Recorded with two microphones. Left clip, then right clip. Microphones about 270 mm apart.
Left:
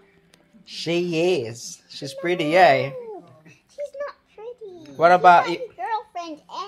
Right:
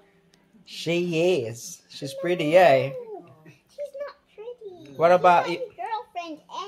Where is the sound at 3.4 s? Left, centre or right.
Centre.